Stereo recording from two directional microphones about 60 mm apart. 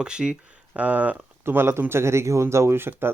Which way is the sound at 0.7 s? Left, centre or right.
Right.